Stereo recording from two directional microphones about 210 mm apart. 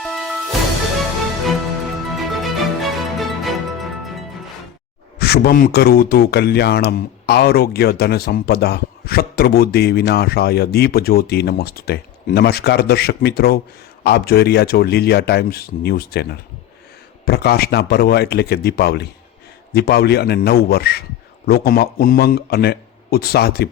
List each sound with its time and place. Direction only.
0.0 s music: centre (ahead or behind)
2.1 s music: centre (ahead or behind)
5.2 s speech: 50° left (ahead or behind)